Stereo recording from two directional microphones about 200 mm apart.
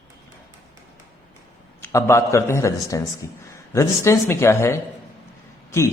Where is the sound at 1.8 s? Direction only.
15° left (ahead or behind).